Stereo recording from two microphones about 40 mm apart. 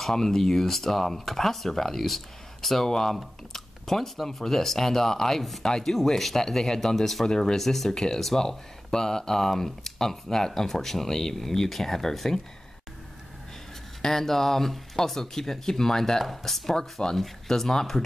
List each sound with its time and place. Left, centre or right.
0.0 s speech: centre
5.6 s speech: centre
5.9 s speech: centre
14.0 s speech: centre
17.0 s speech: left